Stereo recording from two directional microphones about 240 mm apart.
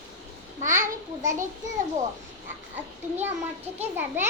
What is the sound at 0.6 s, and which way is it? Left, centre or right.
Speech, right.